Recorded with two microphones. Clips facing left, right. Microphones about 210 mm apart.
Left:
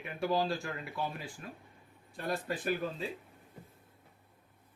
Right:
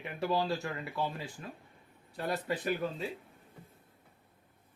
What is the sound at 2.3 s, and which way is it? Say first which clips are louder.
Speech: even; 20° right (ahead or behind).